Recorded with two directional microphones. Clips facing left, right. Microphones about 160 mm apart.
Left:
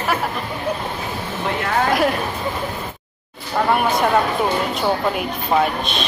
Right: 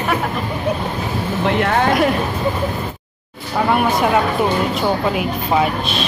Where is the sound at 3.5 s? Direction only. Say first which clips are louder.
Right 1 dB; centre (ahead or behind).